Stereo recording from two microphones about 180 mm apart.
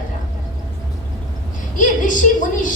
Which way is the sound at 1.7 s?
45° left (ahead or behind).